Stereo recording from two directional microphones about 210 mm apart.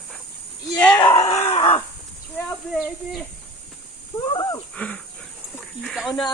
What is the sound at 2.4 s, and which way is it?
Speech, 5° left (ahead or behind).